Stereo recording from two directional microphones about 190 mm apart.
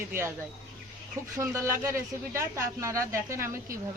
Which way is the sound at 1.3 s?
15° right (ahead or behind).